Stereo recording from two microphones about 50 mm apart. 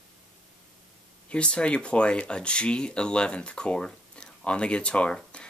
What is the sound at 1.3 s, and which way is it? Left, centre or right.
Speech, left.